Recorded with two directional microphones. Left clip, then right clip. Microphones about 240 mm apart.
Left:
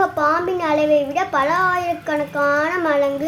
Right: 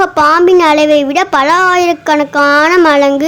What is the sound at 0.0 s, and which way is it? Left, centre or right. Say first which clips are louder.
A woman's voice: right 10 dB; right.